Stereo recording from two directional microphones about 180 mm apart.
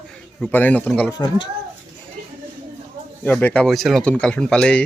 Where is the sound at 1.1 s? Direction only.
25° left (ahead or behind).